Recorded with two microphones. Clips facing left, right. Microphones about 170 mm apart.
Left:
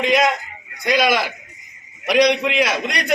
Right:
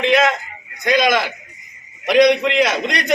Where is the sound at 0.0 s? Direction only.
10° left (ahead or behind).